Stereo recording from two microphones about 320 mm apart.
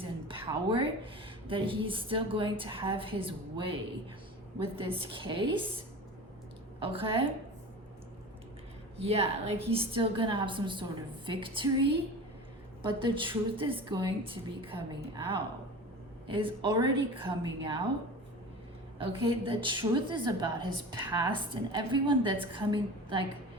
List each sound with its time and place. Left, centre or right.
0.0 s a woman's voice: centre
4.8 s a woman's voice: centre
9.0 s a woman's voice: centre
18.9 s a woman's voice: centre